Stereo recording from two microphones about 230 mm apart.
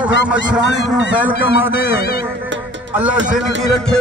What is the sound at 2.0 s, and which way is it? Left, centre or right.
Music, left.